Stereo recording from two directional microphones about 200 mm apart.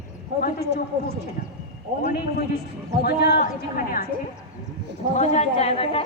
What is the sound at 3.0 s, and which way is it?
Speech, 55° left (ahead or behind).